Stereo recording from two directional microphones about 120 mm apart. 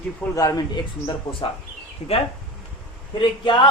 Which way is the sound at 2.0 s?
35° left (ahead or behind).